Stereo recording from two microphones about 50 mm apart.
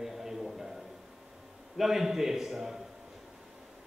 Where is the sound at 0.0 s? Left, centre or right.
Centre.